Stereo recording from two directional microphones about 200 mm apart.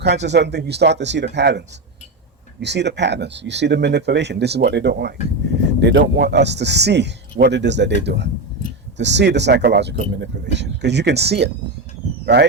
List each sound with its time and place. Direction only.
0.0 s speech: 60° right (ahead or behind)